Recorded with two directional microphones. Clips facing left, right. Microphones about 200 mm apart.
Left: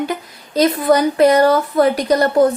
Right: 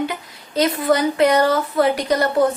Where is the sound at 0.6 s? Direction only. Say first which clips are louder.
Left 4 dB; 40° left (ahead or behind).